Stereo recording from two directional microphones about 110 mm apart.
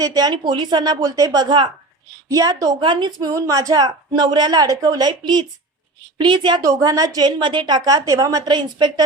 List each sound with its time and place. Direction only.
0.0 s speech: 35° right (ahead or behind)
2.3 s speech: 35° right (ahead or behind)
2.8 s a woman's voice: 45° right (ahead or behind)
6.6 s speech: 30° right (ahead or behind)